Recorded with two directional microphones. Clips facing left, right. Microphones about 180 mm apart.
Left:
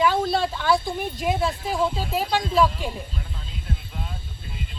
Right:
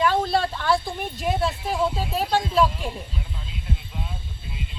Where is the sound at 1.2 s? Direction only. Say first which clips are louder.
Even; centre (ahead or behind).